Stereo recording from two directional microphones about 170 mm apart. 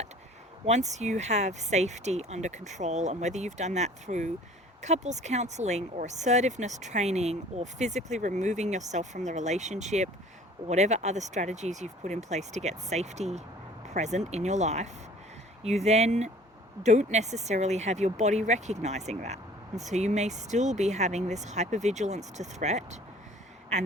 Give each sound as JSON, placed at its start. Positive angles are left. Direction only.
{"t": 0.6, "sound": "speech", "side_deg": -40}